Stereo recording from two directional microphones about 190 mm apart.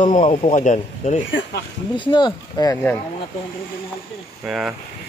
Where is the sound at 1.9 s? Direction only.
25° left (ahead or behind).